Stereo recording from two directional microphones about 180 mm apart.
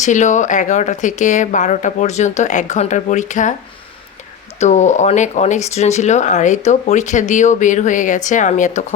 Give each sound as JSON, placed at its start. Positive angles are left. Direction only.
{"t": 0.0, "sound": "speech", "side_deg": 40}
{"t": 4.6, "sound": "speech", "side_deg": 40}